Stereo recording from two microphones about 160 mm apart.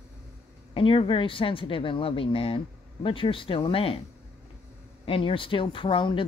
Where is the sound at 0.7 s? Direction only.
35° left (ahead or behind).